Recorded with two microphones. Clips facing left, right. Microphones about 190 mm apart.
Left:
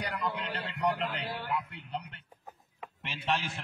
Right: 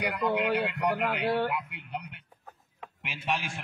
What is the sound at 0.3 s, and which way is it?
A man's voice, 65° right (ahead or behind).